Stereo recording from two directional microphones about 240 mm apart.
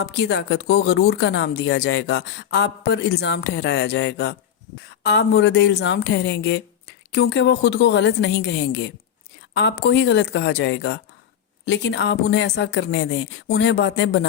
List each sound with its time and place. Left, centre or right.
0.0 s speech: left